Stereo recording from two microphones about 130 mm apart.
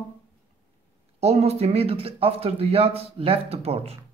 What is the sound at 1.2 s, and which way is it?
Speech, 55° right (ahead or behind).